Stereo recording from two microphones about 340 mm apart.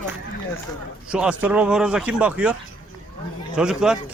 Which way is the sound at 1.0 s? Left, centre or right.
Centre.